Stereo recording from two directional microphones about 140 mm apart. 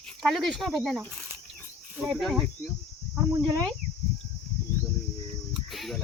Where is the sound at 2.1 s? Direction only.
Centre (ahead or behind).